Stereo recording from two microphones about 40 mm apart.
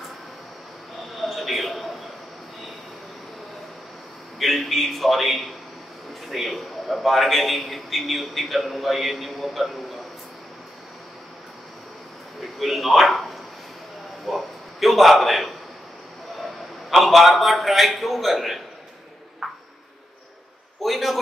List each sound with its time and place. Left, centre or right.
1.2 s a sound: centre
4.4 s a man's voice: centre
12.5 s a man's voice: centre
16.9 s a man's voice: centre
19.4 s ping: centre
20.8 s a man's voice: centre